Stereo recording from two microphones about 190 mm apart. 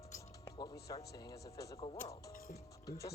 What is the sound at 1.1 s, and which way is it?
Speech, 20° left (ahead or behind).